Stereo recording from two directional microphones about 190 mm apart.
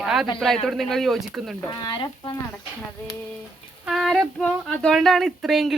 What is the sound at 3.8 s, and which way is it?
Speech, centre (ahead or behind).